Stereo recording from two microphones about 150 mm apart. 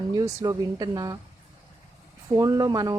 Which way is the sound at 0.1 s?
25° right (ahead or behind).